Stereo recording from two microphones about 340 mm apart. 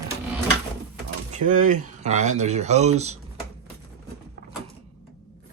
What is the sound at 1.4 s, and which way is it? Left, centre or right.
Speech, right.